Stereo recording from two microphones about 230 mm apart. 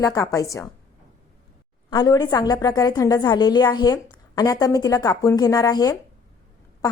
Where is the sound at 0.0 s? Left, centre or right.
Centre.